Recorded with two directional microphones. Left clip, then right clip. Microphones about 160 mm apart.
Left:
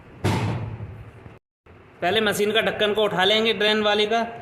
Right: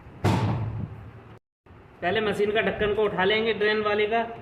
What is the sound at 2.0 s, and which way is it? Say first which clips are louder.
A man's voice: left 3 dB; 45° left (ahead or behind).